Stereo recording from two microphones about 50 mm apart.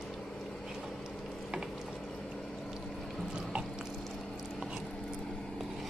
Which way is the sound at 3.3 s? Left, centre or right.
Centre.